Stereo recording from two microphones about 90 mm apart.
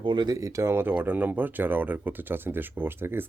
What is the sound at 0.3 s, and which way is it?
Speech, 35° right (ahead or behind).